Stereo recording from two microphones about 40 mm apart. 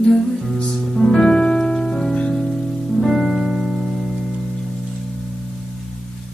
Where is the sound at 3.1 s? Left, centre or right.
Centre.